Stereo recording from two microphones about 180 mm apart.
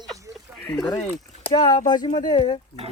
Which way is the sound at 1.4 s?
25° left (ahead or behind).